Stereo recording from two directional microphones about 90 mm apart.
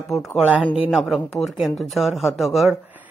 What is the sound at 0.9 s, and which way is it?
Speech, centre (ahead or behind).